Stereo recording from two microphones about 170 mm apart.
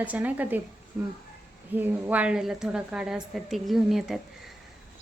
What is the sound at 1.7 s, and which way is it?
A woman's voice, 10° right (ahead or behind).